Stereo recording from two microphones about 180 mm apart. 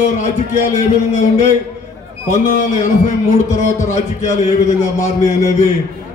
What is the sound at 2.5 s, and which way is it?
A man's voice, 45° left (ahead or behind).